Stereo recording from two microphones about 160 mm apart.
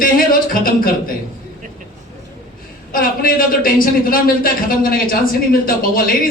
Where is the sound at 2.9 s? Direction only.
60° left (ahead or behind).